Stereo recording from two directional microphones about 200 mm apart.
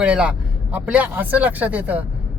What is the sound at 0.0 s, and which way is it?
Speech, 5° right (ahead or behind).